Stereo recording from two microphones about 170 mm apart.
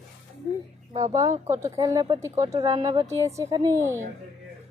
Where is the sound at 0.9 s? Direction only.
20° right (ahead or behind).